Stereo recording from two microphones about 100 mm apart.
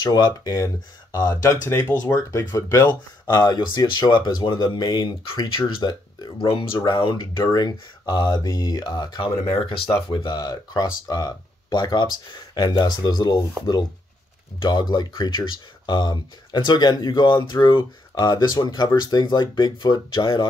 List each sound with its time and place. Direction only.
0.0 s speech: 45° left (ahead or behind)
1.8 s speech: 20° left (ahead or behind)
2.9 s speech: 45° left (ahead or behind)
14.6 s speech: 45° left (ahead or behind)